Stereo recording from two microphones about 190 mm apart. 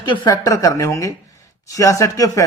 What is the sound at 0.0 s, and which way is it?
A man's voice, 25° left (ahead or behind).